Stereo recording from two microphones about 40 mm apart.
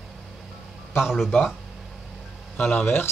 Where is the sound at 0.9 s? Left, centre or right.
Centre.